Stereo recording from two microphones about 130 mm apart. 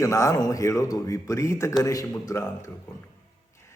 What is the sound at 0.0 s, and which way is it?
Speech, 25° left (ahead or behind).